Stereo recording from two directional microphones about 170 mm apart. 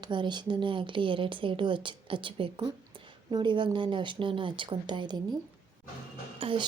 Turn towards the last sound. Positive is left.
turn(degrees=-30)  # may be behind; listen again after turning